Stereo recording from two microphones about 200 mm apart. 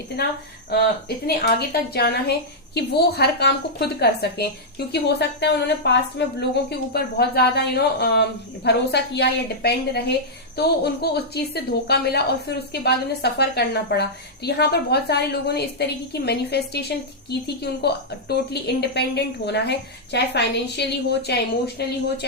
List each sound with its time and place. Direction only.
0.7 s a woman's voice: 50° left (ahead or behind)